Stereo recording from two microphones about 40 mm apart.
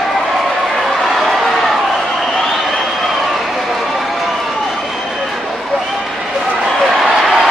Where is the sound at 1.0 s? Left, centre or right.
Centre.